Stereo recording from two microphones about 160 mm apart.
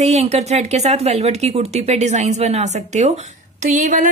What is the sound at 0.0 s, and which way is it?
A woman's voice, 40° right (ahead or behind).